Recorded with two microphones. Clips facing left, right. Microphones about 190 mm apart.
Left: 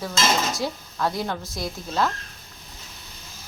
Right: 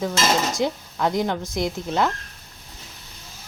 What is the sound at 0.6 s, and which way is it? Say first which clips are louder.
Speech: right 4 dB; 20° right (ahead or behind).